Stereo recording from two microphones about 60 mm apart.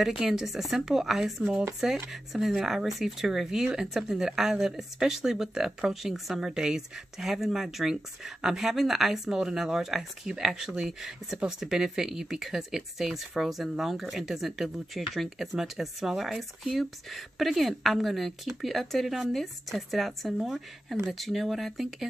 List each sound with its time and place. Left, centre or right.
0.0 s speech: centre